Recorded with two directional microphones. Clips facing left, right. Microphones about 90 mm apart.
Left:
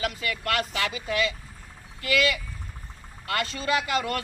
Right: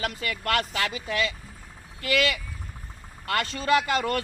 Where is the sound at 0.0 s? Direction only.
45° right (ahead or behind).